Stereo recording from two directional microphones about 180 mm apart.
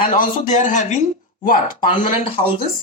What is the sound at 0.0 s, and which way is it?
Speech, 45° left (ahead or behind).